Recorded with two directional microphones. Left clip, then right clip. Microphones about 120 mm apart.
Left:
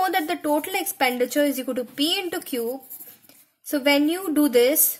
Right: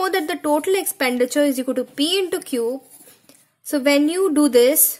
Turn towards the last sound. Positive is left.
turn(degrees=-40)  # may be behind; listen again after turning